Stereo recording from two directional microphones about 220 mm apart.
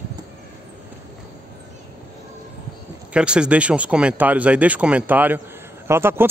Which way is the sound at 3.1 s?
5° right (ahead or behind).